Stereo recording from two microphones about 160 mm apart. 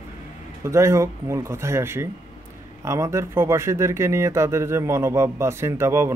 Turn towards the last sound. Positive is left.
turn(degrees=-15)  # may be behind; listen again after turning